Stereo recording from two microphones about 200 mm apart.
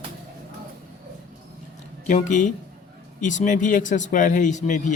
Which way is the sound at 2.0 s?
40° left (ahead or behind).